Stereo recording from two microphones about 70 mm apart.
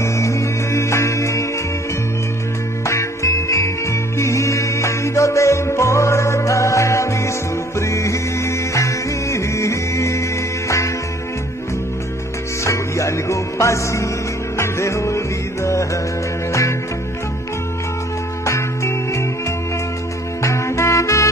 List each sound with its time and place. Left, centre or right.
0.0 s music: left
2.8 s music: left
12.6 s music: left
18.4 s music: left
20.4 s music: left